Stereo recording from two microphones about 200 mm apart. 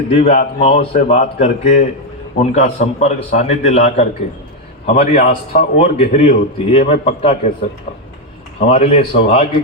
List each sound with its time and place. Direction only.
0.1 s a man's voice: 25° left (ahead or behind)
8.7 s a man's voice: 30° left (ahead or behind)